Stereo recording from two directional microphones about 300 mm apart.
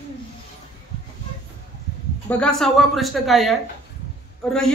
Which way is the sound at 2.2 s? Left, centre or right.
Centre.